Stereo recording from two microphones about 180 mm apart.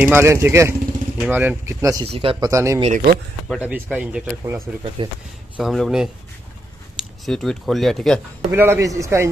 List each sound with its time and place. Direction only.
0.0 s speech: 15° right (ahead or behind)
2.0 s speech: 30° right (ahead or behind)
2.5 s speech: 15° right (ahead or behind)
2.8 s speech: 50° right (ahead or behind)
3.4 s speech: 5° right (ahead or behind)
5.0 s speech: 30° right (ahead or behind)
5.6 s speech: centre (ahead or behind)
7.2 s speech: centre (ahead or behind)
8.5 s speech: 10° right (ahead or behind)